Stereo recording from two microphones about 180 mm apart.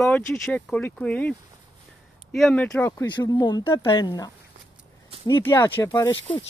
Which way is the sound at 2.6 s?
15° left (ahead or behind).